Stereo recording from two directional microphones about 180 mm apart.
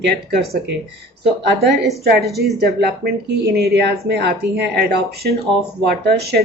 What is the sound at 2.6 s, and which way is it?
Speech, 60° right (ahead or behind).